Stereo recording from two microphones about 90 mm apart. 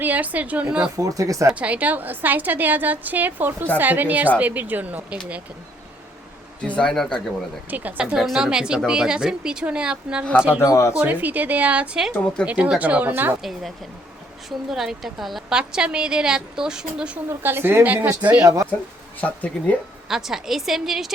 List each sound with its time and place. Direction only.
0.0 s a woman's voice: 15° right (ahead or behind)
0.9 s speech: 40° right (ahead or behind)
1.5 s a woman's voice: 15° right (ahead or behind)
6.6 s speech: 10° left (ahead or behind)
7.7 s a woman's voice: 20° right (ahead or behind)
8.1 s a woman's voice: 5° right (ahead or behind)
10.6 s speech: 35° left (ahead or behind)
10.9 s a woman's voice: 15° right (ahead or behind)
13.4 s a woman's voice: centre (ahead or behind)
17.2 s a woman's voice: 25° right (ahead or behind)
18.4 s speech: 35° right (ahead or behind)
19.2 s speech: 15° left (ahead or behind)
20.1 s a woman's voice: 5° right (ahead or behind)